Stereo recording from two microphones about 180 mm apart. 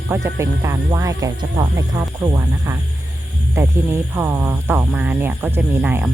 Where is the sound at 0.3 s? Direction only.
15° right (ahead or behind).